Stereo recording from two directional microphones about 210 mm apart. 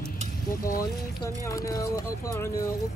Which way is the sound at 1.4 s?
15° left (ahead or behind).